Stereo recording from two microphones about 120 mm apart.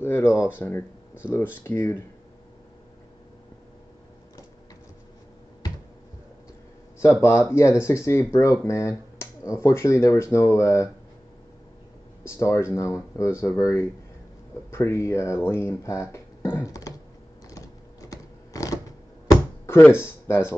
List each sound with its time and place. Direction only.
0.0 s speech: 20° left (ahead or behind)
7.0 s speech: 25° left (ahead or behind)
12.2 s speech: 25° left (ahead or behind)
17.5 s typing: 25° left (ahead or behind)
19.6 s speech: 20° left (ahead or behind)